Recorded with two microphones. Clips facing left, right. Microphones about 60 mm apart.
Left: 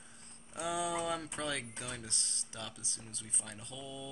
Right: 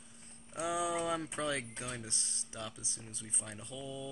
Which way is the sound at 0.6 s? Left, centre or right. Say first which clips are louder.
Right 1 dB; right.